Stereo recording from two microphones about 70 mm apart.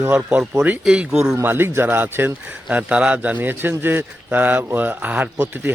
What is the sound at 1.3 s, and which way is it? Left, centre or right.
Speech, right.